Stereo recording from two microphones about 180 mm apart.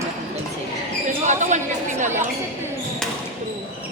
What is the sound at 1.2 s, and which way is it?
Speech, 40° right (ahead or behind).